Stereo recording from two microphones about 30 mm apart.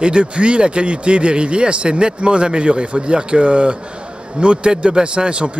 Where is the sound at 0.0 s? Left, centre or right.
Right.